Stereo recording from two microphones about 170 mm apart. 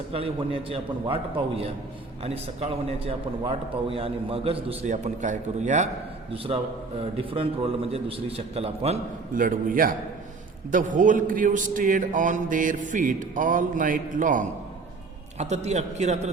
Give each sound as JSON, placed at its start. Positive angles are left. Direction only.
{"t": 0.1, "sound": "a man's voice", "side_deg": -35}
{"t": 9.3, "sound": "a man's voice", "side_deg": -55}